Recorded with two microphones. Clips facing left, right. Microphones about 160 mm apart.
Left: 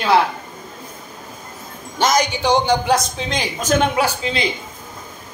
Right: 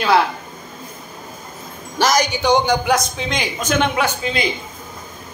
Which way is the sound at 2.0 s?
25° left (ahead or behind).